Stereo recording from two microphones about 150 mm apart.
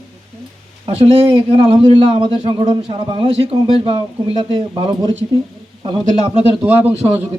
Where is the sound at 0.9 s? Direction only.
40° right (ahead or behind).